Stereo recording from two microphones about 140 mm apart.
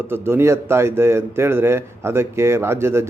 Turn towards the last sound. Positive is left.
turn(degrees=-20)  # may be behind; listen again after turning